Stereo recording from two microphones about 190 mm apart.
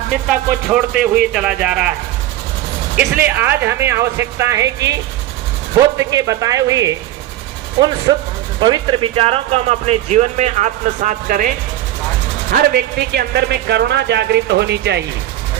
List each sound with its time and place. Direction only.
0.3 s speech: 5° right (ahead or behind)
2.9 s a woman's voice: 5° right (ahead or behind)
6.0 s a woman's voice: 15° right (ahead or behind); by 11.5 s 45° right (ahead or behind)
12.5 s speech: 60° right (ahead or behind)